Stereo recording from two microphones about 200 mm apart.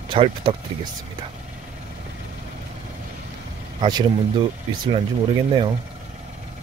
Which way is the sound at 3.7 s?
20° right (ahead or behind).